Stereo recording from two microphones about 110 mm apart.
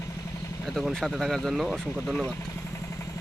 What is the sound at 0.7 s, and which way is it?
Speech, 5° left (ahead or behind).